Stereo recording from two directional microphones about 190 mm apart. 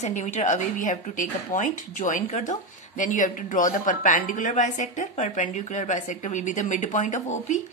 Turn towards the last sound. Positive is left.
turn(degrees=40)  # may be behind; listen again after turning